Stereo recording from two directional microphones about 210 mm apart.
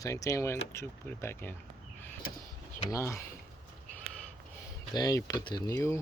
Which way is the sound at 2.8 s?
15° left (ahead or behind).